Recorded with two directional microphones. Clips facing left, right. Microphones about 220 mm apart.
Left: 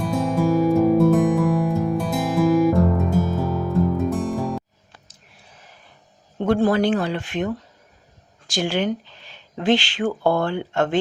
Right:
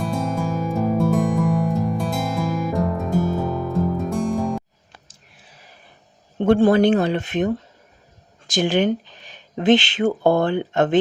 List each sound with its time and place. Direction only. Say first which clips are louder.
0.0 s music: left 3 dB; centre (ahead or behind)
6.4 s speech: right 4 dB; 25° right (ahead or behind)